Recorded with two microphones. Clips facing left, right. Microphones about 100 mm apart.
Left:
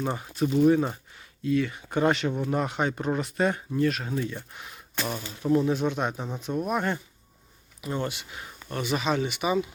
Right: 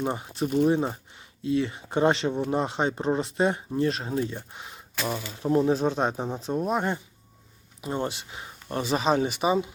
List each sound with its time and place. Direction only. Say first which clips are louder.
0.0 s speech: even; 20° right (ahead or behind)